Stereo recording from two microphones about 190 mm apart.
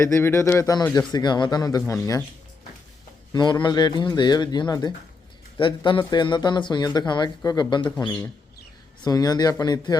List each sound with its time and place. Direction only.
0.0 s speech: 15° left (ahead or behind)
3.3 s speech: 25° left (ahead or behind)